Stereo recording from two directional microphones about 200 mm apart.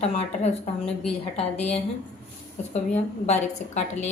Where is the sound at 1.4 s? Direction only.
30° left (ahead or behind).